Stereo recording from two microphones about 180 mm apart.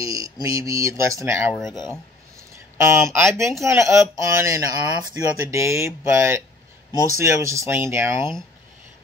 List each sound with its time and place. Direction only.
0.0 s speech: 20° right (ahead or behind)